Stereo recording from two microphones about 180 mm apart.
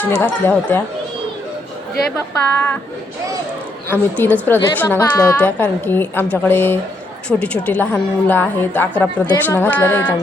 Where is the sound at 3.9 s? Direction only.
10° left (ahead or behind).